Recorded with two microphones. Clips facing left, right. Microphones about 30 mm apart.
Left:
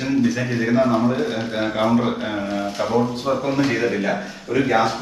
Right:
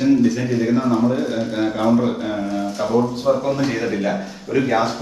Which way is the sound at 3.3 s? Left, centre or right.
Left.